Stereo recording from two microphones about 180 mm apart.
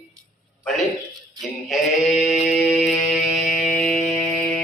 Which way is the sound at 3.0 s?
40° left (ahead or behind).